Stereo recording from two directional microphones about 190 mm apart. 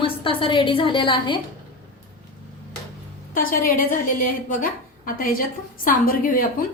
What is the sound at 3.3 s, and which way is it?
A woman's voice, 50° left (ahead or behind).